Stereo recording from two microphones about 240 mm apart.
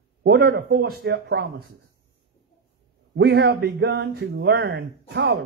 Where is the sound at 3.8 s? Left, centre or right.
Right.